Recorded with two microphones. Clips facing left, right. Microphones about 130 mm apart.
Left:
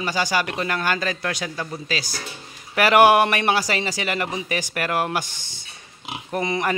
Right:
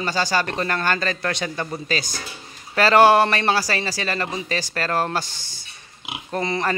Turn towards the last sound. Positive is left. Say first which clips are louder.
# even
turn(degrees=15)  # may be behind; listen again after turning